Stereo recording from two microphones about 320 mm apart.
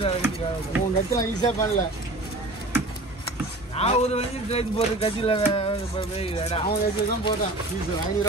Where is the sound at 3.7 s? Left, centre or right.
Centre.